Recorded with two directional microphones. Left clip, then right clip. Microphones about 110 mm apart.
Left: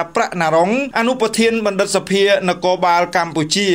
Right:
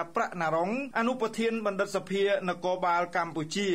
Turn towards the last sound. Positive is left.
turn(degrees=20)  # may be behind; listen again after turning